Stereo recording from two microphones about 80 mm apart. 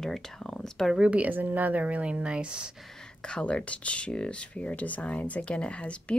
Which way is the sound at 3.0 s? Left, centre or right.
Centre.